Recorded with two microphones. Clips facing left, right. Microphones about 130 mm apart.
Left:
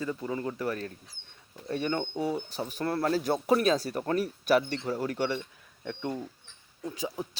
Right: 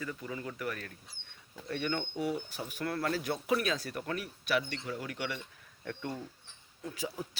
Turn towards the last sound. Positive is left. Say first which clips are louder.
# left 4 dB
turn(degrees=20)  # may be behind; listen again after turning